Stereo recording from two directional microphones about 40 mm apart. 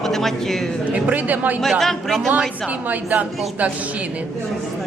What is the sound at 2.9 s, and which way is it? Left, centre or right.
Speech, right.